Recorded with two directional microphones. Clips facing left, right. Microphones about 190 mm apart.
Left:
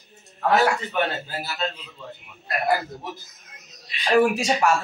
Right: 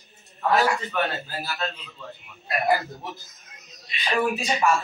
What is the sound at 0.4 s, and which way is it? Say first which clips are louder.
Speech: left 2 dB; 90° left.